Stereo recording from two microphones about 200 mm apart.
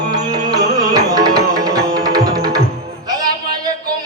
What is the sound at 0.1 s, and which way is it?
Music, 20° right (ahead or behind).